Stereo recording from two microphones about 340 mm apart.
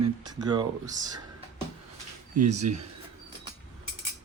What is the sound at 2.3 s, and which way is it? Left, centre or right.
Speech, centre.